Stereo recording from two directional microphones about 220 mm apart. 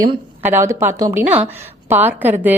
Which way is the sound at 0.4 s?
10° right (ahead or behind).